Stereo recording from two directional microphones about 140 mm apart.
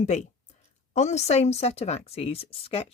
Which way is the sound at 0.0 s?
55° left (ahead or behind).